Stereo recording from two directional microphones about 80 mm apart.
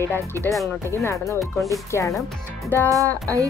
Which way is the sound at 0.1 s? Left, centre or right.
Left.